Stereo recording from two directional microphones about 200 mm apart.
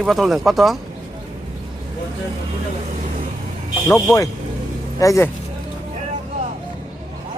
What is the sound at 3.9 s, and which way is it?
Speech, 15° left (ahead or behind).